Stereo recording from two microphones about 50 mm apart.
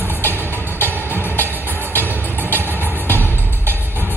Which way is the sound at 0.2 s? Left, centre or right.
Left.